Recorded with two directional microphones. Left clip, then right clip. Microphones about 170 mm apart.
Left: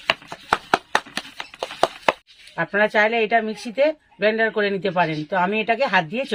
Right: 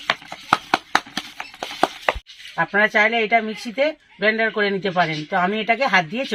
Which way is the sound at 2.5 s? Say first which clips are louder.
Right 1 dB; 30° left (ahead or behind).